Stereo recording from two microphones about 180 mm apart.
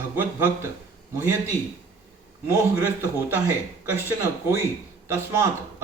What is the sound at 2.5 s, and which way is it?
Speech, 10° right (ahead or behind).